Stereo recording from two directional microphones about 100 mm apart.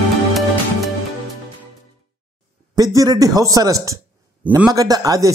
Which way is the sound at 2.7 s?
40° right (ahead or behind).